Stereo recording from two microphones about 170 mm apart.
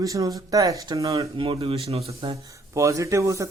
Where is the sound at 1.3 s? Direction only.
30° right (ahead or behind).